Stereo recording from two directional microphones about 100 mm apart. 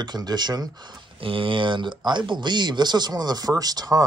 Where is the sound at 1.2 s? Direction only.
60° right (ahead or behind).